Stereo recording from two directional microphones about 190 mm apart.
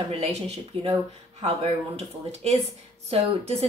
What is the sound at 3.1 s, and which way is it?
Speech, 35° right (ahead or behind).